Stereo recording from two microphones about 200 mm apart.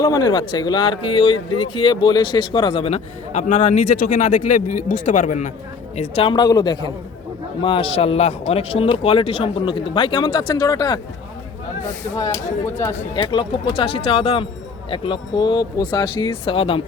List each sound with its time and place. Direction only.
0.0 s speech: 20° left (ahead or behind); by 5.5 s 40° left (ahead or behind)
6.0 s speech: 25° left (ahead or behind)
12.1 s speech: 15° left (ahead or behind)
13.0 s speech: 25° left (ahead or behind)